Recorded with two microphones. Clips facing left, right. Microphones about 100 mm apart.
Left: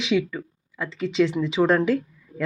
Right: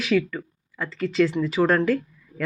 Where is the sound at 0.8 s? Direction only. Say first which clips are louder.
Even; centre (ahead or behind).